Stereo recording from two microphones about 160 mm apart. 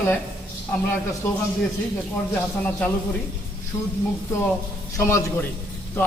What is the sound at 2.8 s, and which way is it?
Speech, 10° left (ahead or behind).